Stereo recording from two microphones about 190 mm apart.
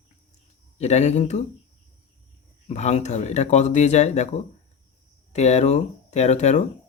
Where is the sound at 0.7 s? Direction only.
35° left (ahead or behind).